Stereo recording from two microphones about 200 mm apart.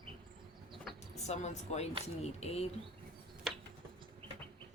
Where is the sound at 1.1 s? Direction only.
35° left (ahead or behind).